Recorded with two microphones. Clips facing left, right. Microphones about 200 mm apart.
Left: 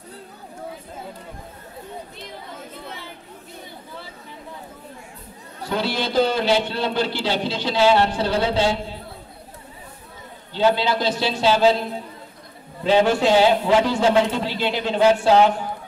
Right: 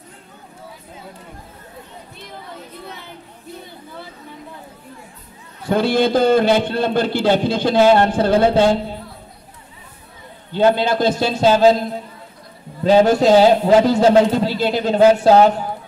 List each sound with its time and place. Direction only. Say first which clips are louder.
5.7 s a man's voice: right 8 dB; 50° right (ahead or behind)
10.5 s a man's voice: right 4 dB; 50° right (ahead or behind)